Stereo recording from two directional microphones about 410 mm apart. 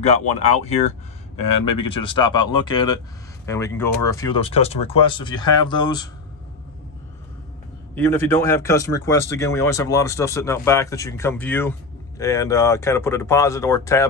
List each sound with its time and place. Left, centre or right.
0.0 s speech: centre
7.9 s speech: centre